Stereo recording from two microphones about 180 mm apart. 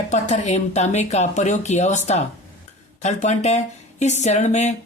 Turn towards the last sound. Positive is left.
turn(degrees=40)  # may be behind; listen again after turning